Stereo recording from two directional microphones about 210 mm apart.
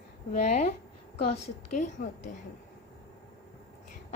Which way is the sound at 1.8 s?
35° left (ahead or behind).